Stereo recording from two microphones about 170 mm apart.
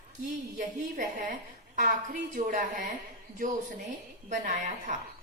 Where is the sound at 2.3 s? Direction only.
50° right (ahead or behind).